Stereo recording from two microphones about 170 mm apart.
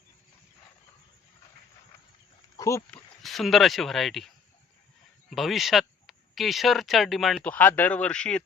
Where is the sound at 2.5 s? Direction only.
20° left (ahead or behind).